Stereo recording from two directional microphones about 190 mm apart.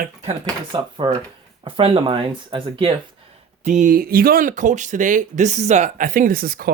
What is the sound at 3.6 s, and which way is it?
Speech, 40° right (ahead or behind).